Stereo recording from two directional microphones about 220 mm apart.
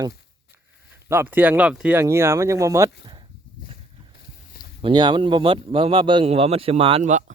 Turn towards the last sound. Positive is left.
turn(degrees=-30)  # may be behind; listen again after turning